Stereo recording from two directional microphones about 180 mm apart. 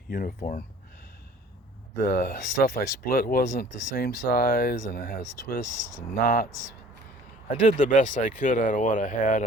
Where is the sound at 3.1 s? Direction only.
55° left (ahead or behind).